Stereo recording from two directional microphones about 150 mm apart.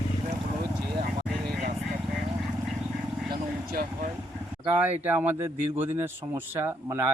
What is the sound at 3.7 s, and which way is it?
Vehicle, 90° right.